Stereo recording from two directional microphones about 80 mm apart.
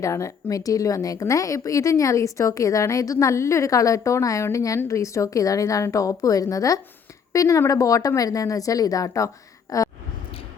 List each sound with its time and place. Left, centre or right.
0.0 s a woman's voice: left